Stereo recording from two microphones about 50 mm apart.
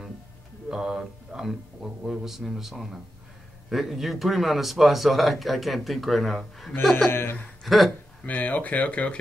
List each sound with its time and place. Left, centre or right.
0.7 s speech: centre
7.1 s speech: left
7.6 s speech: centre
8.3 s speech: left